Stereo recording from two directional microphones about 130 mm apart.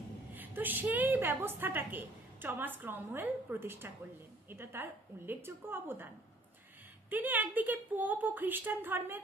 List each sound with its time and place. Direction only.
0.3 s a woman's voice: 15° right (ahead or behind)
7.1 s a woman's voice: 15° right (ahead or behind)